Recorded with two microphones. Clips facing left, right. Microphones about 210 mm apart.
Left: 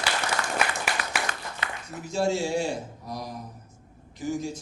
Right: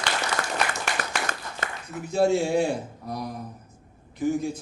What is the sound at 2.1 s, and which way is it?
A man's voice, 55° right (ahead or behind).